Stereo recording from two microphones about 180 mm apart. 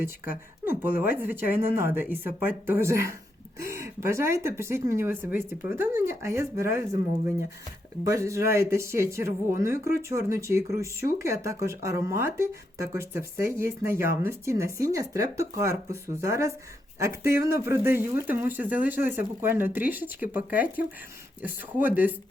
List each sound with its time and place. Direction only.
0.0 s speech: 10° right (ahead or behind)
8.0 s speech: 15° right (ahead or behind)